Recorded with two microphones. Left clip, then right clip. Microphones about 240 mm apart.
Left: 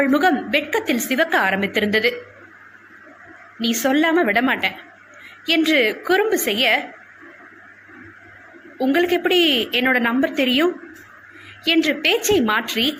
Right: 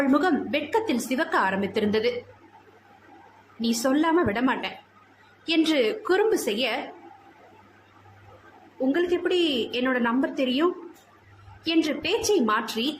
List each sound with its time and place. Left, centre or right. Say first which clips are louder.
0.0 s a woman's voice: left 6 dB; centre
3.8 s a woman's voice: left 5 dB; centre
8.9 s a woman's voice: left 6 dB; centre